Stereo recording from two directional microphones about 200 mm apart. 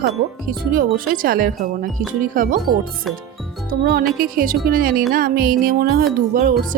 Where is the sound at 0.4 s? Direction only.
45° right (ahead or behind).